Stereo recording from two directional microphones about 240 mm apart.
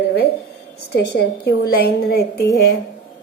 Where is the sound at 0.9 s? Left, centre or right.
Left.